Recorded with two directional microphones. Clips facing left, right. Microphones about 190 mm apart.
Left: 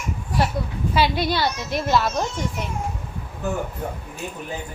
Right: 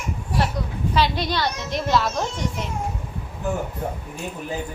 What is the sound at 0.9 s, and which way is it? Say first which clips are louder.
A woman's voice: left 1 dB; 10° left (ahead or behind).